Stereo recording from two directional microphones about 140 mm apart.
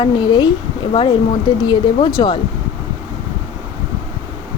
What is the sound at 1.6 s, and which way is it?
Speech, 30° left (ahead or behind).